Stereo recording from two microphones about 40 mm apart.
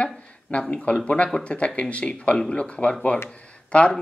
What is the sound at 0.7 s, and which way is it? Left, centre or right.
Speech, left.